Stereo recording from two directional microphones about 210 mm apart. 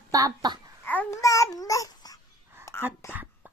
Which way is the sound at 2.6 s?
10° left (ahead or behind).